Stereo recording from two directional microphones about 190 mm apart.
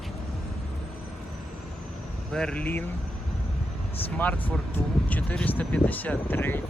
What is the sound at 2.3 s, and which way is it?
Speech, 5° left (ahead or behind).